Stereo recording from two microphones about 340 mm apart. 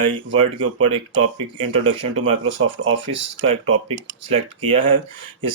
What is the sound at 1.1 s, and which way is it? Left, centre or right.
Speech, right.